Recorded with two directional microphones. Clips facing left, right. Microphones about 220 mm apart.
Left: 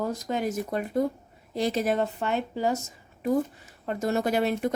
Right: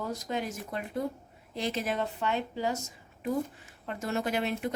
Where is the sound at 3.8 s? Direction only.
40° left (ahead or behind).